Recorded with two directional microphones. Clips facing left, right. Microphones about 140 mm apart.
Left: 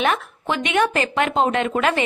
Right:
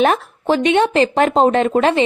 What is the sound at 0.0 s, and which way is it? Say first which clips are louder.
Speech: right 6 dB; 35° right (ahead or behind).